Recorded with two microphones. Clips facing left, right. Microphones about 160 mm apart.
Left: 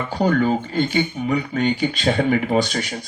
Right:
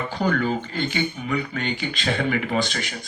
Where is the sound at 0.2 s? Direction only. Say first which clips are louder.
Left 5 dB; 40° left (ahead or behind).